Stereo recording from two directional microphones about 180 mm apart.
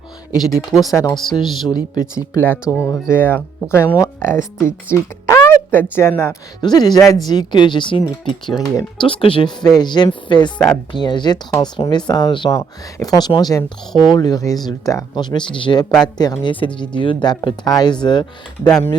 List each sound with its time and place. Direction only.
0.3 s speech: centre (ahead or behind)
1.4 s speech: 25° left (ahead or behind)
2.3 s speech: 15° left (ahead or behind)
6.6 s speech: 25° left (ahead or behind)